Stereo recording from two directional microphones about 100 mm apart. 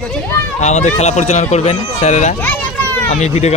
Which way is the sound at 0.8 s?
90° left.